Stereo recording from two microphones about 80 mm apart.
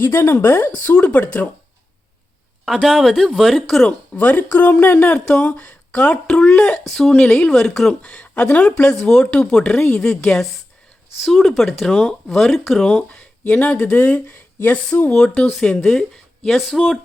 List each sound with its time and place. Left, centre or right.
0.0 s speech: left
2.6 s speech: centre
4.1 s speech: left
13.8 s speech: left; by 17.0 s centre